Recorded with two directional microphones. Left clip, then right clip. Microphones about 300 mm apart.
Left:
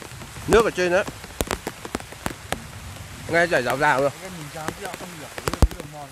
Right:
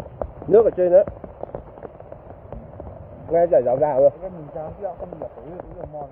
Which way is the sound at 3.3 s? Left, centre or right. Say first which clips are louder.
Right 3 dB; left.